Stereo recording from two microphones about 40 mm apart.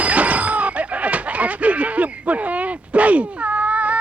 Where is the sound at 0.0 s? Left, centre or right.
Right.